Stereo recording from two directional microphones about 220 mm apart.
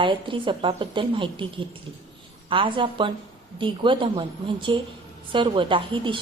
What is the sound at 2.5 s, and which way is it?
A woman's voice, 25° right (ahead or behind).